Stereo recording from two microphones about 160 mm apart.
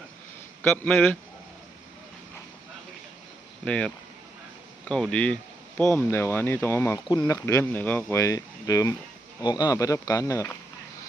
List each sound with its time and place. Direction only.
0.6 s speech: 15° left (ahead or behind)
3.6 s speech: 5° left (ahead or behind)